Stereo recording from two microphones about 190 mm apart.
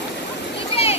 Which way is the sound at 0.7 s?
30° left (ahead or behind).